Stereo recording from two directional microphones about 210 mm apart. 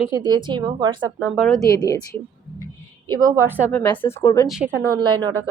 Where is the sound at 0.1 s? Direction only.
20° right (ahead or behind).